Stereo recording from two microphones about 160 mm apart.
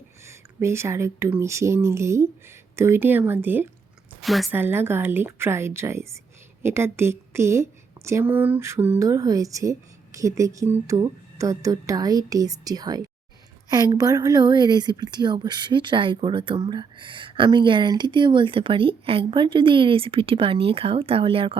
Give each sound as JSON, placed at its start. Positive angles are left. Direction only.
{"t": 0.3, "sound": "speech", "side_deg": -15}
{"t": 4.2, "sound": "a woman's voice", "side_deg": 0}
{"t": 4.5, "sound": "a woman's voice", "side_deg": -15}